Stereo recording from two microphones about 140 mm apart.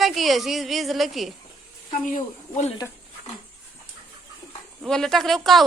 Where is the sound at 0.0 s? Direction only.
Centre (ahead or behind).